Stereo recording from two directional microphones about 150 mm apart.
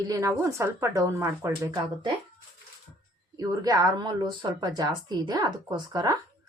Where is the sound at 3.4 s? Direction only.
25° right (ahead or behind).